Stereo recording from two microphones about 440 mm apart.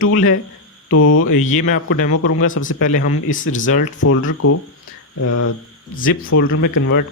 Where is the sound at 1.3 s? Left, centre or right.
Centre.